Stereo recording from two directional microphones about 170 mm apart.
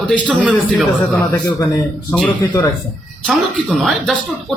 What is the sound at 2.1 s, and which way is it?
Speech, 10° left (ahead or behind).